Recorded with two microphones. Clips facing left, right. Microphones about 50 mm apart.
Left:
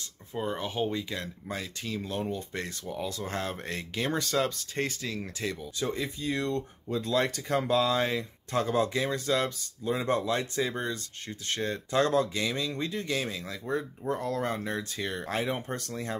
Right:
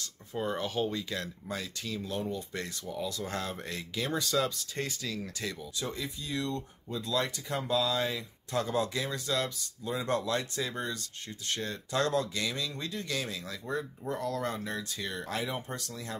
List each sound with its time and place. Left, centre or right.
0.4 s speech: centre
0.7 s speech: left
14.0 s speech: left